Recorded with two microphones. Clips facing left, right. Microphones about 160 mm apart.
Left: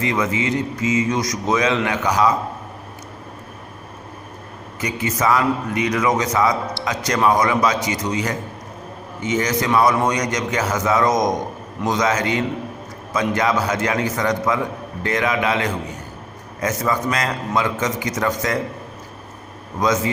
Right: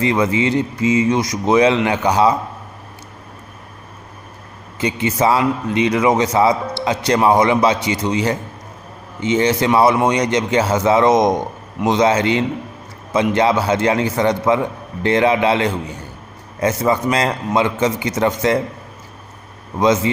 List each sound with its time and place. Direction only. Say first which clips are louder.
0.0 s a man's voice: right 5 dB; 30° right (ahead or behind)
4.8 s a man's voice: right 5 dB; 25° right (ahead or behind)
19.8 s a man's voice: right 4 dB; 25° right (ahead or behind)